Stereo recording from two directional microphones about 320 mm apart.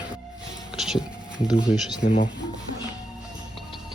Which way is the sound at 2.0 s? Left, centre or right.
Left.